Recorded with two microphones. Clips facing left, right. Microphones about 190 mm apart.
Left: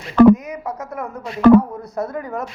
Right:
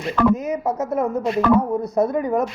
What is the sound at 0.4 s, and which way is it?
Speech, 25° right (ahead or behind).